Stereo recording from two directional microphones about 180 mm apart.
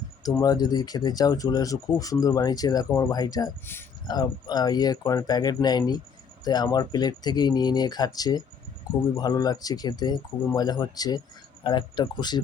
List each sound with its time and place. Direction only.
0.4 s speech: 20° left (ahead or behind)